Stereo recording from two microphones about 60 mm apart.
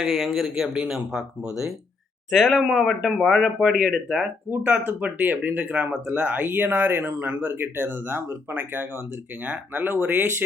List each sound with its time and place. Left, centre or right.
0.0 s speech: centre
4.4 s speech: right
6.2 s speech: right